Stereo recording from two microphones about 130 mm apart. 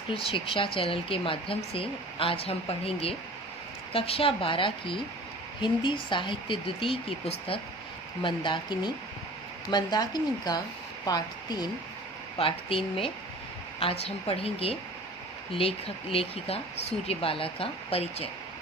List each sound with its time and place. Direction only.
0.1 s speech: 45° left (ahead or behind)
12.4 s speech: 45° left (ahead or behind)
16.1 s speech: 50° left (ahead or behind)